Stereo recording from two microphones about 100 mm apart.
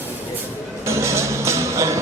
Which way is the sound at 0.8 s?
30° right (ahead or behind).